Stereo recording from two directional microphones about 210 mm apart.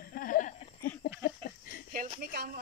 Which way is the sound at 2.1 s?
45° right (ahead or behind).